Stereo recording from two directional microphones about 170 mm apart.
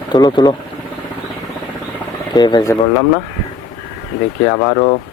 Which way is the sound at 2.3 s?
25° left (ahead or behind).